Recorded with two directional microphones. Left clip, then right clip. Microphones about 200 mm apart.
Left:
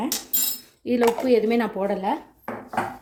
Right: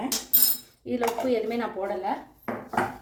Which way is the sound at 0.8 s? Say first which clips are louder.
Left 6 dB; 50° left (ahead or behind).